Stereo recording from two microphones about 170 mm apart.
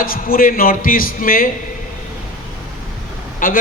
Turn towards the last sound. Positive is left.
turn(degrees=55)  # may be behind; listen again after turning